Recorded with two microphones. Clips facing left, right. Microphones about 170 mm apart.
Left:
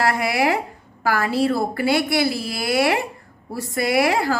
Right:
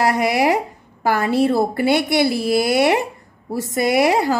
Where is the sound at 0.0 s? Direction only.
20° right (ahead or behind).